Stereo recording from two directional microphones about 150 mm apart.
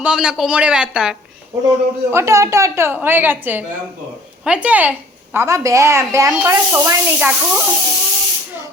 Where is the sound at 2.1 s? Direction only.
20° right (ahead or behind).